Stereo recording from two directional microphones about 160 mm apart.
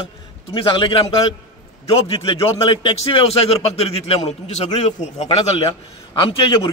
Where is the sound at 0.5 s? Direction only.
30° left (ahead or behind).